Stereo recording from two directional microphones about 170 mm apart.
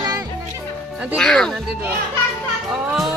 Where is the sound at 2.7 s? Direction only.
Centre (ahead or behind).